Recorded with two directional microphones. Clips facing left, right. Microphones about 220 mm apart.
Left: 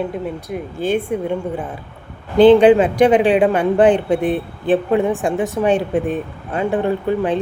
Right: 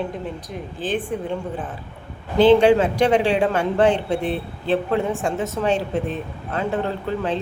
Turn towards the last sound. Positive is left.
turn(degrees=15)  # may be behind; listen again after turning